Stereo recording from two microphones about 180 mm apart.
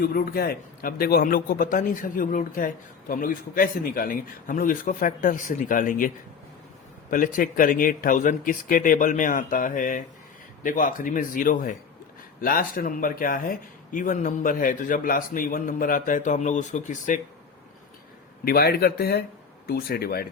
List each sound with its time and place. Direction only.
0.0 s a man's voice: 55° left (ahead or behind)
7.1 s a man's voice: 50° left (ahead or behind)
18.4 s speech: 60° left (ahead or behind)